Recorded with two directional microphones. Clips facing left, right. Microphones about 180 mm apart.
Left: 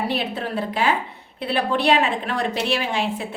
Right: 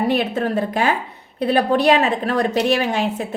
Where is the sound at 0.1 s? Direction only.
50° right (ahead or behind).